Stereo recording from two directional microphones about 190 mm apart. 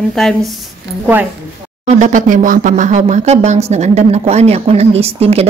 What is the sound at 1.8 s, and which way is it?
Speech, 40° right (ahead or behind).